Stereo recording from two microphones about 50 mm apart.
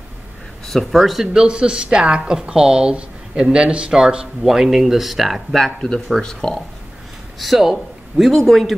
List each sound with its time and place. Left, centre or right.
0.7 s speech: centre
5.8 s speech: centre
7.3 s a man's voice: centre